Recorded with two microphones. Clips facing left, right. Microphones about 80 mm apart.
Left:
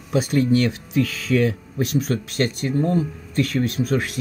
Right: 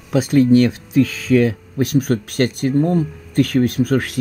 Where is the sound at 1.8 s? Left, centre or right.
Right.